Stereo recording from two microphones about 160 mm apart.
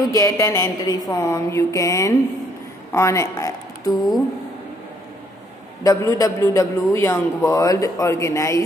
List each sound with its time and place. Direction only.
0.0 s a man's voice: 20° left (ahead or behind)
5.9 s a man's voice: 20° left (ahead or behind)